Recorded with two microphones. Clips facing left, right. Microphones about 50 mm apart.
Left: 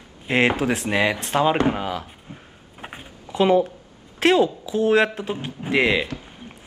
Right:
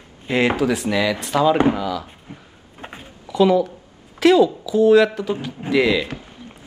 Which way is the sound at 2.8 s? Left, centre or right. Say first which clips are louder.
Right 1 dB; centre.